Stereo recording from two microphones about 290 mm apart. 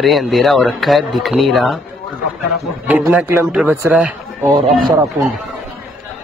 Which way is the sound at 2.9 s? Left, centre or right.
Centre.